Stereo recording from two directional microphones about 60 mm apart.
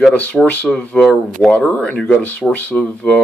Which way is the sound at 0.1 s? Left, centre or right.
Left.